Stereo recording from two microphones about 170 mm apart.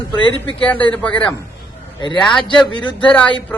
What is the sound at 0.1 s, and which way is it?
Speech, 30° left (ahead or behind).